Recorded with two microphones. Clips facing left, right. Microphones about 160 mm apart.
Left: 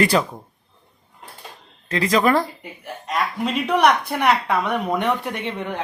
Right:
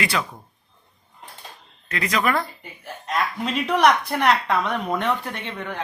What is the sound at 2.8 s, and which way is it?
A woman's voice, 5° left (ahead or behind).